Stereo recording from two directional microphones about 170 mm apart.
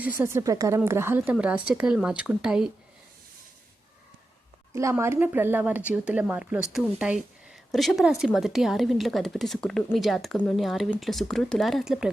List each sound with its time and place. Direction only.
0.0 s a woman's voice: 15° right (ahead or behind)
4.7 s speech: 15° right (ahead or behind)